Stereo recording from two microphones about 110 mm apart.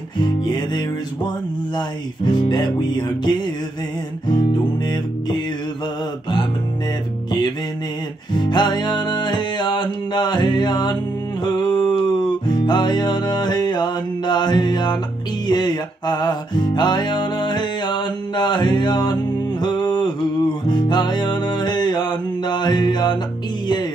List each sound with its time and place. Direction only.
1.8 s music: 45° left (ahead or behind)
8.4 s music: 40° left (ahead or behind)
19.6 s a sound: 40° left (ahead or behind)
20.6 s music: 40° left (ahead or behind)
22.4 s mantra: 40° left (ahead or behind)